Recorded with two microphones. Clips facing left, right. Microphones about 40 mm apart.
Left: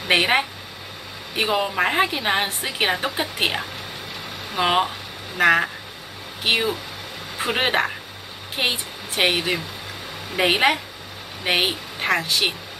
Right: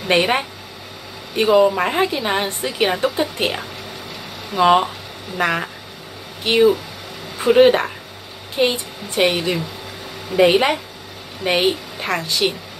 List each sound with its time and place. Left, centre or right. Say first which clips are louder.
0.1 s a woman's voice: right 1 dB; centre
7.3 s a woman's voice: right 9 dB; centre